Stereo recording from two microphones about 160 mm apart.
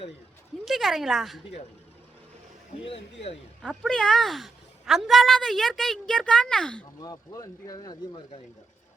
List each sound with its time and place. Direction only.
0.6 s speech: centre (ahead or behind)
3.6 s a woman's voice: centre (ahead or behind)
7.0 s speech: 25° left (ahead or behind)